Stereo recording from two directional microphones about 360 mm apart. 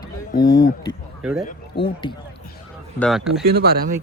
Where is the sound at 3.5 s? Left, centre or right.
Right.